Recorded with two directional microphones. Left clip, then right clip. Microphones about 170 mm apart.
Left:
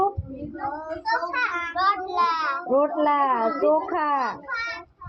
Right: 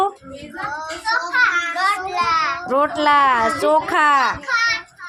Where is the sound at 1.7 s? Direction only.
35° right (ahead or behind).